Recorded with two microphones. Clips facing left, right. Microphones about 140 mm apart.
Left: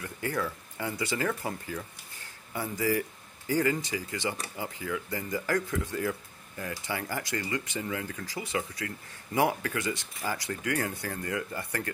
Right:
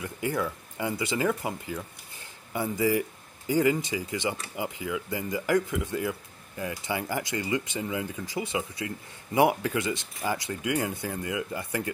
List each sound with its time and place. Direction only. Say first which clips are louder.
0.0 s speech: right 3 dB; 15° right (ahead or behind)